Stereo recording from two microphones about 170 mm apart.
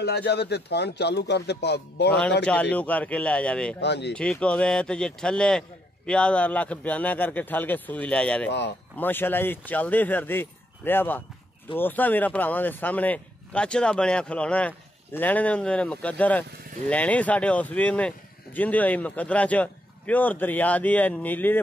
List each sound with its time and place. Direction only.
0.0 s speech: 75° left (ahead or behind)
2.7 s speech: 10° left (ahead or behind)
3.8 s speech: 85° left
4.1 s speech: 5° left (ahead or behind)
8.5 s speech: 90° left
8.9 s speech: 10° left (ahead or behind)